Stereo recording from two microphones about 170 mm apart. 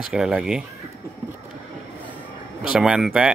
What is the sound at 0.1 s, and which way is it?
Speech, 5° right (ahead or behind).